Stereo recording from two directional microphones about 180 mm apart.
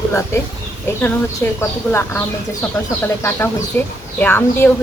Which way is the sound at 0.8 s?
15° left (ahead or behind).